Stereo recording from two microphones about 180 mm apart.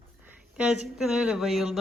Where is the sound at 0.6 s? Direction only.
5° right (ahead or behind).